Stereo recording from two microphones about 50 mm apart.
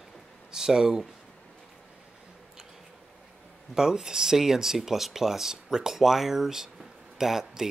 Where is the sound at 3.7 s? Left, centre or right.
Centre.